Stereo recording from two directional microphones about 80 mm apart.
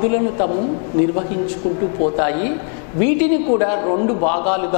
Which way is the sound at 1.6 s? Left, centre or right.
Centre.